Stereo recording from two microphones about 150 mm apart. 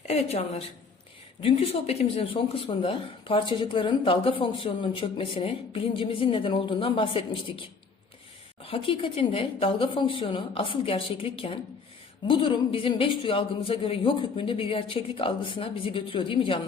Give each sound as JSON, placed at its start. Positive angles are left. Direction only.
{"t": 0.1, "sound": "a woman's voice", "side_deg": 45}